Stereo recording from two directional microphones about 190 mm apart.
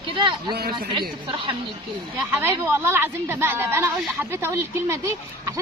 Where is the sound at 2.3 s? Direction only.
10° right (ahead or behind).